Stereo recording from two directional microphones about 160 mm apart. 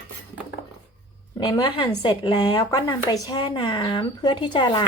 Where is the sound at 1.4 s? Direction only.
30° left (ahead or behind).